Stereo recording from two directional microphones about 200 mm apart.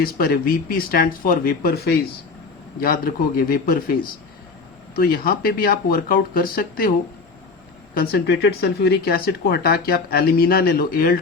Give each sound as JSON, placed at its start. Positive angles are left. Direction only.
{"t": 0.0, "sound": "speech", "side_deg": 45}
{"t": 4.9, "sound": "speech", "side_deg": 45}
{"t": 7.9, "sound": "speech", "side_deg": 50}